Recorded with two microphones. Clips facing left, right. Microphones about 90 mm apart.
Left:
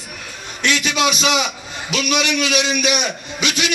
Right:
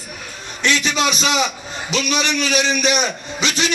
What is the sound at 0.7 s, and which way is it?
A man's voice, 40° right (ahead or behind).